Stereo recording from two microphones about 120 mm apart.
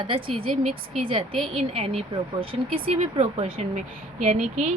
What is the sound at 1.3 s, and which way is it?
Speech, centre (ahead or behind).